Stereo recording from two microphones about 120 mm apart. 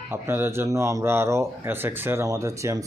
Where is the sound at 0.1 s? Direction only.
20° right (ahead or behind).